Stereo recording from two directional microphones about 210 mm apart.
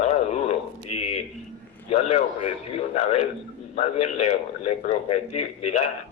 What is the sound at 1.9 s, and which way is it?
A man's voice, 30° left (ahead or behind).